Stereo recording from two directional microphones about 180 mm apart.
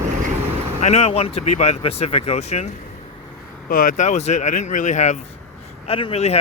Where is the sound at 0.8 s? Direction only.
35° left (ahead or behind).